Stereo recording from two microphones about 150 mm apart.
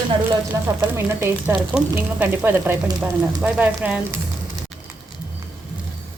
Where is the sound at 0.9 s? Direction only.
15° right (ahead or behind).